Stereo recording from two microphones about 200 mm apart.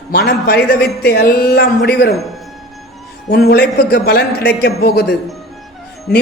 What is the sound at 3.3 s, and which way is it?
A man's voice, 55° left (ahead or behind).